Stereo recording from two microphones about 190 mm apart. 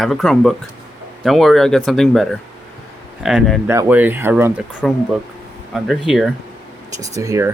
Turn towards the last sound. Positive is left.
turn(degrees=-15)  # may be behind; listen again after turning